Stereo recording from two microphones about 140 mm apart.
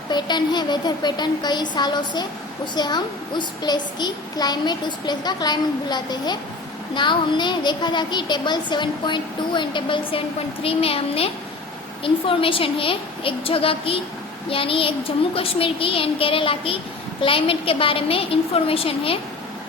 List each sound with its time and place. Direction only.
0.1 s speech: 30° left (ahead or behind)